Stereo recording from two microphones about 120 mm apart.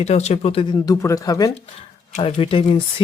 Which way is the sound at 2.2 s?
50° left (ahead or behind).